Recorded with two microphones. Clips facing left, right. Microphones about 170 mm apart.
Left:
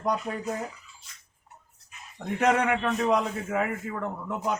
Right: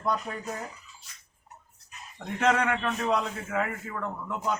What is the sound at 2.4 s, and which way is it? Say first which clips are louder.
A man's voice: left 2 dB; 15° left (ahead or behind).